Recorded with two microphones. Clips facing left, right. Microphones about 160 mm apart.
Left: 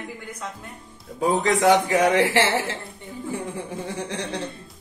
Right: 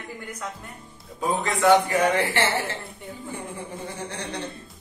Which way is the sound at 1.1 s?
90° left.